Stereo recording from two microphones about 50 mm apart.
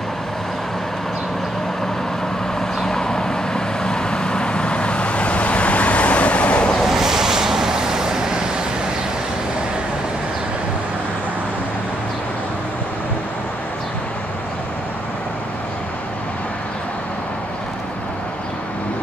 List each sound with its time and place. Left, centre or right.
2.8 s vehicle: centre
6.8 s vehicle: centre